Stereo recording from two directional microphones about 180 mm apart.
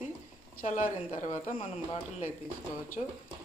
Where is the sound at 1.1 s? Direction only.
45° left (ahead or behind).